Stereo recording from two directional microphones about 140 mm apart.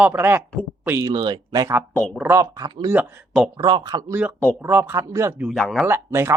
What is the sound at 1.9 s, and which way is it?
Speech, 5° left (ahead or behind).